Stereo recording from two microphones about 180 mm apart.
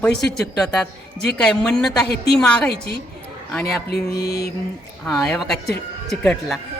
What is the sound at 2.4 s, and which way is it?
Speech, 5° left (ahead or behind).